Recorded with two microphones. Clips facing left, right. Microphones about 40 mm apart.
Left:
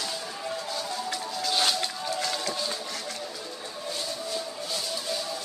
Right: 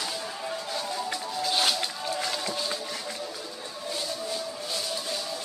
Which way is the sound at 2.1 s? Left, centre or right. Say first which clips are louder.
Left 1 dB; centre.